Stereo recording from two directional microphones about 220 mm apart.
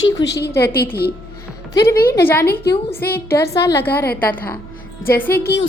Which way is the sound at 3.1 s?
10° left (ahead or behind).